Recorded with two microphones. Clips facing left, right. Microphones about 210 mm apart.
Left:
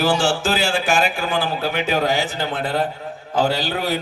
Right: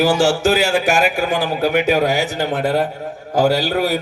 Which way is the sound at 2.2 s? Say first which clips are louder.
Right 4 dB; 40° right (ahead or behind).